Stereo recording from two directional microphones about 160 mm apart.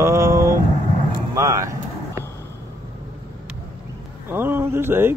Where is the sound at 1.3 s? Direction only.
20° right (ahead or behind).